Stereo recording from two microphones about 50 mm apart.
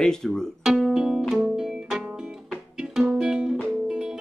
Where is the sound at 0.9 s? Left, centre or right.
Centre.